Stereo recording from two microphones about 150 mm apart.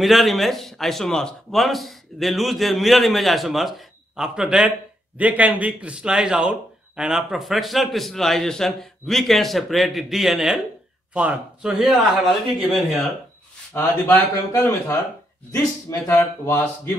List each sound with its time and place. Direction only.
0.0 s a man's voice: centre (ahead or behind)
13.7 s a man's voice: 15° left (ahead or behind)